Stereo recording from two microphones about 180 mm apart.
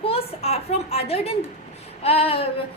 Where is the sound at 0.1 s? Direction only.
35° left (ahead or behind).